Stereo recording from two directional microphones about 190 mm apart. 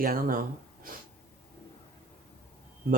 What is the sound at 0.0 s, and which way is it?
Speech, 50° right (ahead or behind).